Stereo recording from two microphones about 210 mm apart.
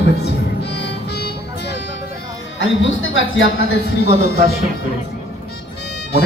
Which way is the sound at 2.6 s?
65° left (ahead or behind).